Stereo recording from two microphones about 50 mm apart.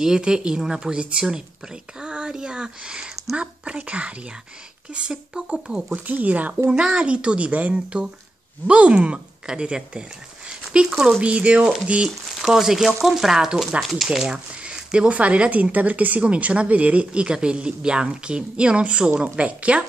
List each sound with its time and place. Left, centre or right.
0.0 s a woman's voice: centre
6.0 s speech: right
6.7 s speech: centre
12.4 s a woman's voice: centre; by 19.8 s right